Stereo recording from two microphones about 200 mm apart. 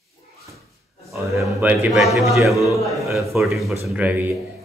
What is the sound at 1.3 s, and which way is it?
A man's voice, 10° right (ahead or behind).